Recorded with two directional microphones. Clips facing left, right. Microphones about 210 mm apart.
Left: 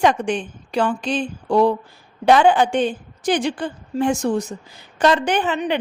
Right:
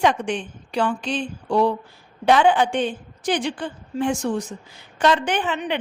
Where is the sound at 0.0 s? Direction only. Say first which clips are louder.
Left 2 dB; 40° left (ahead or behind).